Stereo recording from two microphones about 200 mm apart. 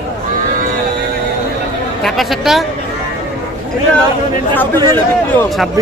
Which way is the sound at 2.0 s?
Centre (ahead or behind).